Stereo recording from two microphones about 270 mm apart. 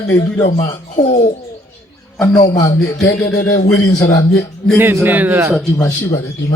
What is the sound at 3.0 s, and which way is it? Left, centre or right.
Speech, left.